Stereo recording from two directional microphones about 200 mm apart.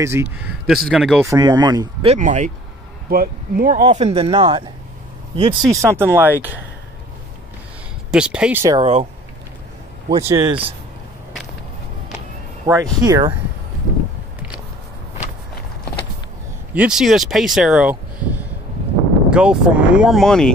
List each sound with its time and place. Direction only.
0.0 s speech: 10° right (ahead or behind)
1.2 s speech: 15° right (ahead or behind)
2.0 s speech: 35° right (ahead or behind)
5.6 s speech: centre (ahead or behind)
5.9 s speech: 10° right (ahead or behind)
8.1 s speech: 5° right (ahead or behind)
8.7 s speech: 30° right (ahead or behind)
10.1 s speech: 20° right (ahead or behind)
12.7 s speech: 20° right (ahead or behind)
16.7 s speech: 5° right (ahead or behind)